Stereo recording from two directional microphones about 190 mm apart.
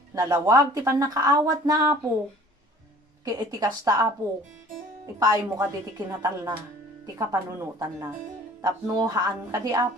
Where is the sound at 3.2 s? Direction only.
20° right (ahead or behind).